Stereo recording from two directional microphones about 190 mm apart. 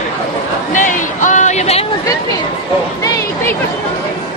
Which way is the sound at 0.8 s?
40° left (ahead or behind).